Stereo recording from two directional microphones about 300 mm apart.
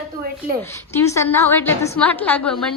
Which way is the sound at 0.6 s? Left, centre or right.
Centre.